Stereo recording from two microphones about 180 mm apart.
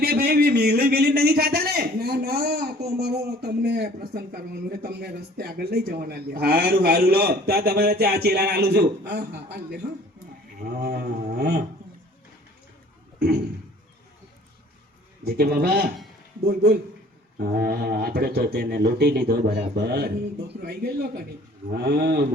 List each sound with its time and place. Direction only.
0.0 s a man's voice: 60° right (ahead or behind)
13.1 s a sound: 65° right (ahead or behind)
15.3 s a man's voice: 60° right (ahead or behind)
17.3 s a man's voice: 55° right (ahead or behind)